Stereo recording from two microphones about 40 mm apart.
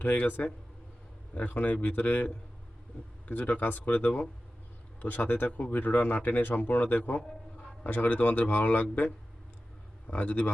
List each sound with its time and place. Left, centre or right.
0.0 s a man's voice: left
3.2 s a man's voice: left
6.0 s speech: left
6.2 s a man's voice: left
10.1 s a man's voice: left